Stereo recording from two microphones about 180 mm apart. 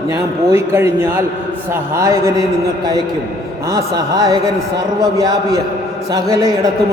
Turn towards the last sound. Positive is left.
turn(degrees=-20)  # may be behind; listen again after turning